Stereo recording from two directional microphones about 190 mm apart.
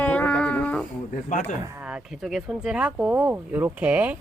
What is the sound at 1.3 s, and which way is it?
Speech, 40° left (ahead or behind).